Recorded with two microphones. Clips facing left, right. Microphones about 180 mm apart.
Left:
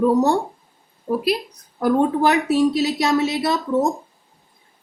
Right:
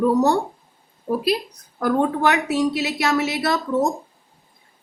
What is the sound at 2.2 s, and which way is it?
A woman's voice, 35° left (ahead or behind).